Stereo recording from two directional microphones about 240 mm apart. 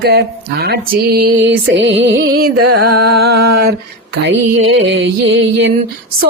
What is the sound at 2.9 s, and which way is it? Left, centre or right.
Music, right.